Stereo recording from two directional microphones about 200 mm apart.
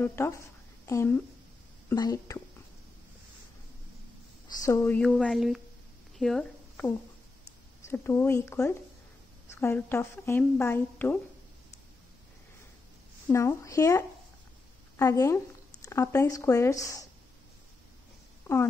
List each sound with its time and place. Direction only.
0.0 s a woman's voice: 10° left (ahead or behind)
4.6 s a woman's voice: 10° left (ahead or behind)
6.1 s a sound: centre (ahead or behind)
7.8 s a woman's voice: 10° left (ahead or behind)
13.3 s a woman's voice: 15° left (ahead or behind)